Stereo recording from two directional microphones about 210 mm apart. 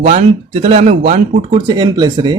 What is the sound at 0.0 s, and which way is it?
Speech, 30° right (ahead or behind).